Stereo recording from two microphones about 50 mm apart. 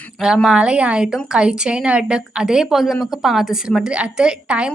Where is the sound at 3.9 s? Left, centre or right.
Centre.